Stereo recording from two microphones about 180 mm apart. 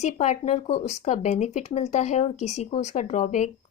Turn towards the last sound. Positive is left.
turn(degrees=40)  # may be behind; listen again after turning